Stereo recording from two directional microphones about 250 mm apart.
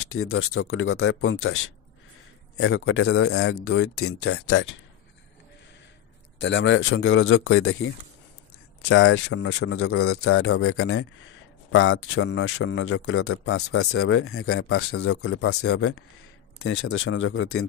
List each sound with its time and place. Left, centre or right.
0.1 s a man's voice: left
6.4 s a man's voice: left